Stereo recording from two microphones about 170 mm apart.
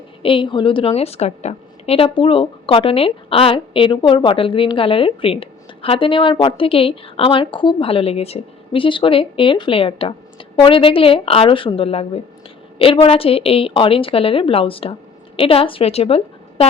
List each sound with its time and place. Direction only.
0.2 s a woman's voice: 30° left (ahead or behind)